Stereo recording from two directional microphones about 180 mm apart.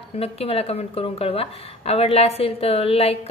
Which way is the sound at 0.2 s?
35° left (ahead or behind).